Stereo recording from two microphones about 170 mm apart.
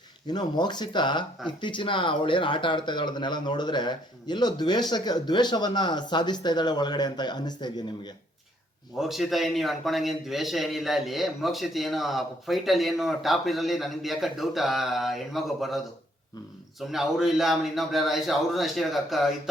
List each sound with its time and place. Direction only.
0.3 s speech: 25° left (ahead or behind)
9.0 s a man's voice: centre (ahead or behind)
16.8 s a man's voice: centre (ahead or behind)